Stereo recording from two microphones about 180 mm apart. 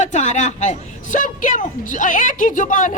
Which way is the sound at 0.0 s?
40° left (ahead or behind).